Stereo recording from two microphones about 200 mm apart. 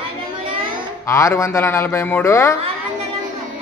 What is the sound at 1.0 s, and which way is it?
A woman's voice, 15° left (ahead or behind).